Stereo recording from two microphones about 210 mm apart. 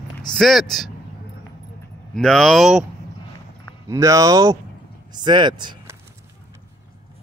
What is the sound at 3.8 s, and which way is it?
Speech, 15° right (ahead or behind).